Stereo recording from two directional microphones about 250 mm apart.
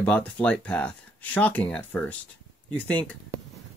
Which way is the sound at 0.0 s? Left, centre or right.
Centre.